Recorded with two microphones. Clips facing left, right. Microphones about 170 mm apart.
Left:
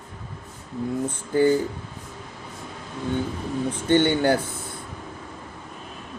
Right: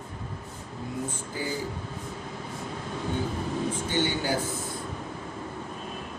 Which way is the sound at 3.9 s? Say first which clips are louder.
Left 11 dB; 60° left (ahead or behind).